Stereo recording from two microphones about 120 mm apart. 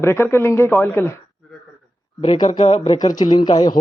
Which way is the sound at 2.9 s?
35° left (ahead or behind).